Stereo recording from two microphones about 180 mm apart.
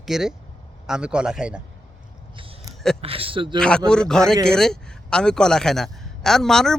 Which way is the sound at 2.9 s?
30° right (ahead or behind).